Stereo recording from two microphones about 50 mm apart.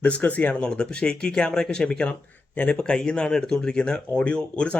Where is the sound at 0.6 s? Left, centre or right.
Centre.